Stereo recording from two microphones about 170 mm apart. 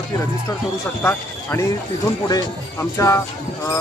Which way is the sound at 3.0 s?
20° left (ahead or behind).